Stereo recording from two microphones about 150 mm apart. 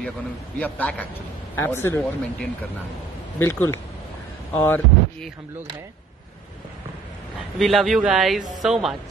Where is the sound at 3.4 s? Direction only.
15° left (ahead or behind).